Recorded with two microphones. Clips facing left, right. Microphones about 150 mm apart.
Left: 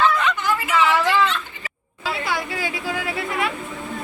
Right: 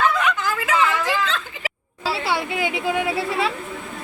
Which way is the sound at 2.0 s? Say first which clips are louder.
Right 2 dB; 30° right (ahead or behind).